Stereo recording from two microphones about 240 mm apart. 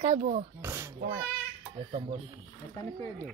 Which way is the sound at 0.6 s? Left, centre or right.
Centre.